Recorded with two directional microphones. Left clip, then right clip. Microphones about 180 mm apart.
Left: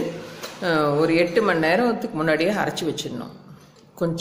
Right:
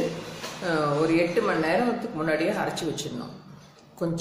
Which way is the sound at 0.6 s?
50° left (ahead or behind).